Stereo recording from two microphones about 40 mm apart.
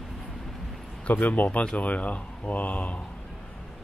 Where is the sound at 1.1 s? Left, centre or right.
Left.